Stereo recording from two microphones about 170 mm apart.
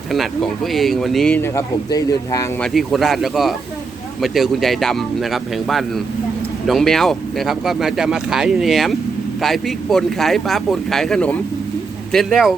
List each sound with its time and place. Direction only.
0.1 s speech: centre (ahead or behind)
1.4 s speech: 15° left (ahead or behind)
2.6 s speech: centre (ahead or behind)